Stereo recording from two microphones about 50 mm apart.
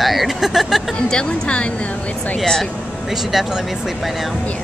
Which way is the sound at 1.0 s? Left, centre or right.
Centre.